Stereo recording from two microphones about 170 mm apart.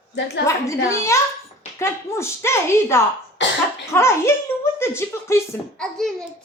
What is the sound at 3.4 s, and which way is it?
Cough, 90° left.